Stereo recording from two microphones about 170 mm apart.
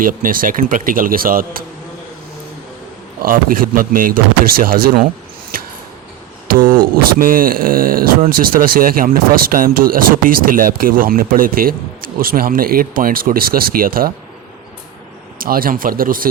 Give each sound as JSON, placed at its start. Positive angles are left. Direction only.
{"t": 0.0, "sound": "speech", "side_deg": -55}
{"t": 3.2, "sound": "speech", "side_deg": -55}
{"t": 6.5, "sound": "speech", "side_deg": -60}
{"t": 15.4, "sound": "speech", "side_deg": -55}